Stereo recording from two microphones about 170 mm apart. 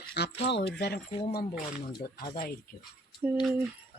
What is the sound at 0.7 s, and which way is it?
Speech, 75° left (ahead or behind).